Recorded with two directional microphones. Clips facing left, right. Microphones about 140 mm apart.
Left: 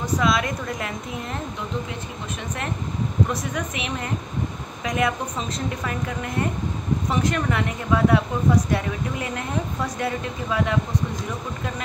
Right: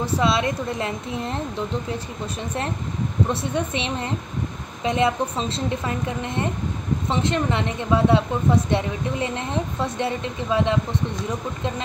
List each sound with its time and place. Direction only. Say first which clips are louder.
0.0 s a woman's voice: right 1 dB; 30° right (ahead or behind)
3.3 s a woman's voice: right 3 dB; 30° right (ahead or behind)